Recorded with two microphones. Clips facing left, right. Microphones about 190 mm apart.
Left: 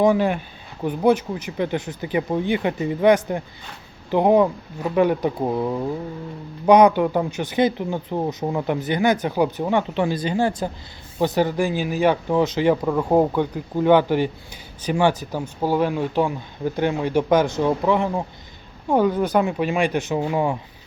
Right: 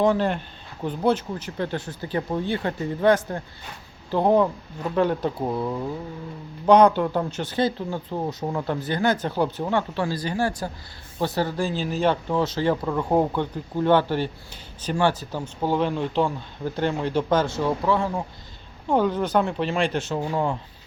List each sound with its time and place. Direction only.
0.0 s speech: 10° left (ahead or behind)